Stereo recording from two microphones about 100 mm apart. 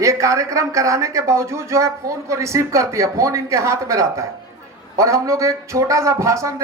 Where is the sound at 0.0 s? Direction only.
30° right (ahead or behind).